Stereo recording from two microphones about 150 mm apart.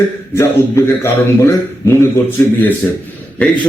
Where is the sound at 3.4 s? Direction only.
10° left (ahead or behind).